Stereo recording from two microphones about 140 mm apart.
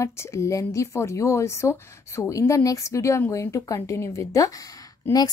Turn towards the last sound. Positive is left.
turn(degrees=25)  # may be behind; listen again after turning